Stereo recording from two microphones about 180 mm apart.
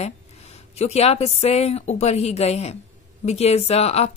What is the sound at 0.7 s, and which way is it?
Speech, 35° left (ahead or behind).